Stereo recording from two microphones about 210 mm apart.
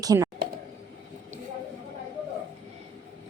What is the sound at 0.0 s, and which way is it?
Speech, 15° right (ahead or behind).